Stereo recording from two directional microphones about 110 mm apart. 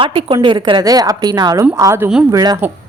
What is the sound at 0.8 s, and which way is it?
A woman's voice, 35° right (ahead or behind).